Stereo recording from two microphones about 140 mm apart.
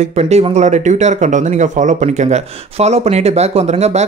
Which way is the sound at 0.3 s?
50° right (ahead or behind).